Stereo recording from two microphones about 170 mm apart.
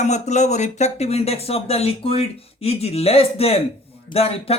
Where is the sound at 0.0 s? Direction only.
45° left (ahead or behind).